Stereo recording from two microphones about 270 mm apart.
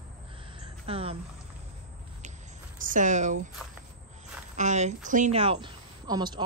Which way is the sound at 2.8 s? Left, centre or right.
Right.